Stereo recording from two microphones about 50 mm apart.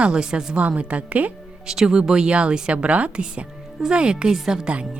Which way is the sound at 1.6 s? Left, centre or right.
Centre.